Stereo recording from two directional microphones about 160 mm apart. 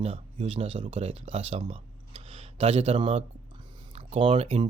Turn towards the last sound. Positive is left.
turn(degrees=-40)  # may be behind; listen again after turning